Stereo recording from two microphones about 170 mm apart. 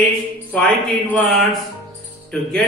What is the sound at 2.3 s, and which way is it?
Speech, 5° left (ahead or behind).